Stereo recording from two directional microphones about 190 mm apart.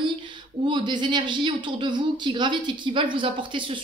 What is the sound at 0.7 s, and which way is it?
Speech, 25° right (ahead or behind).